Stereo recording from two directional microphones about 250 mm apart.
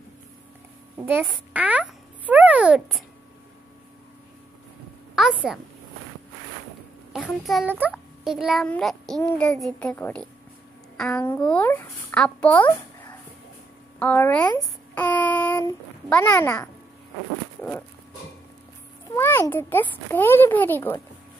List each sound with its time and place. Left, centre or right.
0.9 s a sound: centre
5.1 s a woman's voice: centre
7.1 s a child's voice: centre
13.9 s a child's voice: centre
14.5 s child singing: centre
17.6 s dog: centre
19.1 s a child's voice: centre